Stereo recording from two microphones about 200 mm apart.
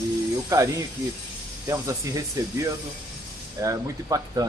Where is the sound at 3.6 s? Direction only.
20° right (ahead or behind).